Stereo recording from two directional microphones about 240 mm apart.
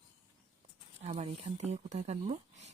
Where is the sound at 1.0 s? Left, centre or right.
Right.